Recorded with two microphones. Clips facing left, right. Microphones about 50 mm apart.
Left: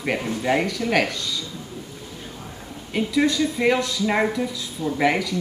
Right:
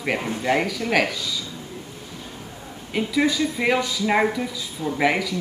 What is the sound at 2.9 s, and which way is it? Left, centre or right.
Speech, centre.